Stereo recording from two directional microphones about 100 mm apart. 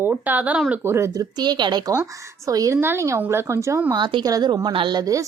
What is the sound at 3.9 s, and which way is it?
A woman's voice, 45° right (ahead or behind).